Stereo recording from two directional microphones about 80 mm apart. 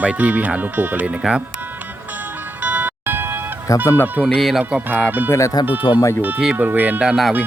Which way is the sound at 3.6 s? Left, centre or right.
Left.